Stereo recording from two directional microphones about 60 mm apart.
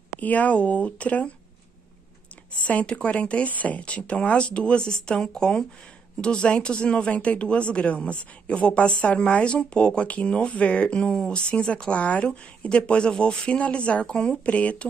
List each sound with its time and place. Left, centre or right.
0.2 s speech: left
2.6 s speech: left